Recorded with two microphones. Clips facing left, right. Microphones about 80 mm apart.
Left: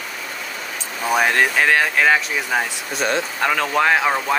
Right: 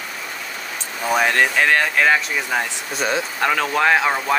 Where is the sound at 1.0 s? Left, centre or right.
Centre.